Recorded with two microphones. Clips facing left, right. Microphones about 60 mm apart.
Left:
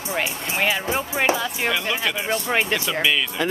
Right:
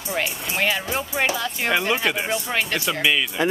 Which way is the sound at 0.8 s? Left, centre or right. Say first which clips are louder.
Left 2 dB; left.